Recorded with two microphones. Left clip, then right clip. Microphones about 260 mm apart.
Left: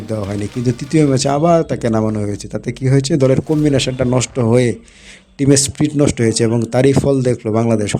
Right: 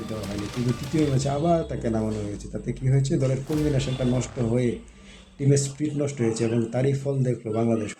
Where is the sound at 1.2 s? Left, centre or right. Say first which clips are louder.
Left 11 dB; left.